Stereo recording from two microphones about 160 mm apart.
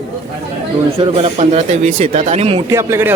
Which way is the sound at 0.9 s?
35° right (ahead or behind).